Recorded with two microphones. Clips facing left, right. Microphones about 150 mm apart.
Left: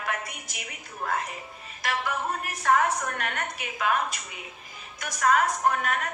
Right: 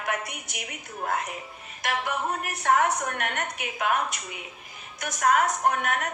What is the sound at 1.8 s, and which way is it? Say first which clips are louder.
A woman's voice: right 1 dB; 60° right (ahead or behind).